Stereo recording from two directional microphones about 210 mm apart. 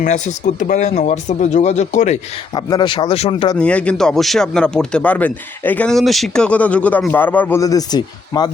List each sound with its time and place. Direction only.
0.0 s speech: 35° left (ahead or behind)
2.6 s speech: 20° left (ahead or behind)
3.6 s speech: 5° left (ahead or behind)